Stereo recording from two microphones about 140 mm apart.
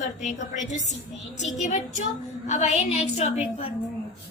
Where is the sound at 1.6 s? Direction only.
60° left (ahead or behind).